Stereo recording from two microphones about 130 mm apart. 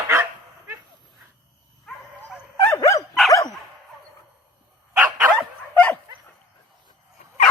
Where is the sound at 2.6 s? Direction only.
25° left (ahead or behind).